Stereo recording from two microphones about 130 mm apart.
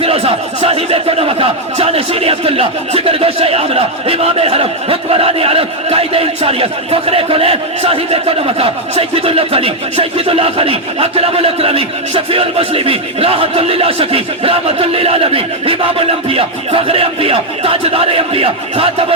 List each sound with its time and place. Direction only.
0.0 s speech: 50° right (ahead or behind)